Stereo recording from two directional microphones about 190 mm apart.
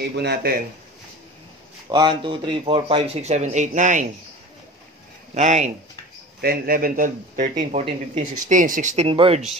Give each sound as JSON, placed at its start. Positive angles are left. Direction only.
{"t": 0.1, "sound": "speech", "side_deg": -60}
{"t": 1.9, "sound": "speech", "side_deg": -25}
{"t": 5.3, "sound": "speech", "side_deg": -35}
{"t": 6.4, "sound": "speech", "side_deg": -55}
{"t": 7.7, "sound": "speech", "side_deg": -30}
{"t": 8.2, "sound": "speech", "side_deg": -45}